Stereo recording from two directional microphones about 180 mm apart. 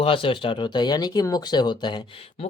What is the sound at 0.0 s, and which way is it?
Speech, 30° left (ahead or behind).